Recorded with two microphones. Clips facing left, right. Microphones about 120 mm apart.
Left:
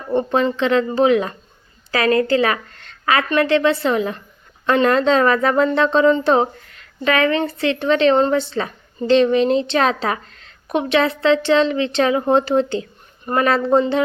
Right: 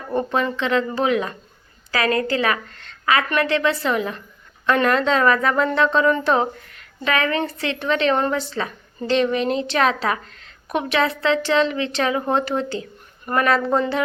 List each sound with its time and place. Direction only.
0.1 s speech: 25° left (ahead or behind)
2.9 s a sound: 35° left (ahead or behind)
3.2 s speech: 30° left (ahead or behind)